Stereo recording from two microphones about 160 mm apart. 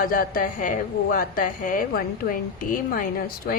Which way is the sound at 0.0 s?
60° left (ahead or behind).